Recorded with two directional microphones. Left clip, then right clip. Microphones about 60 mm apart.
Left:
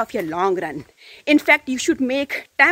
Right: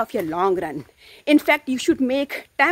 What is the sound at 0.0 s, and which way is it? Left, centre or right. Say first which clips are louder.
Speech: even; right.